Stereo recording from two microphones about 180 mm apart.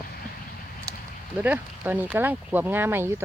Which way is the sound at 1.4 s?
10° right (ahead or behind).